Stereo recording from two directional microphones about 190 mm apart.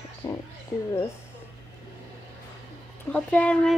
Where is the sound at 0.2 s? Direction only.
20° left (ahead or behind).